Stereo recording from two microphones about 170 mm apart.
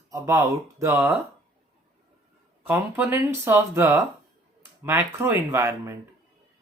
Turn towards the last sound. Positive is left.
turn(degrees=-15)  # may be behind; listen again after turning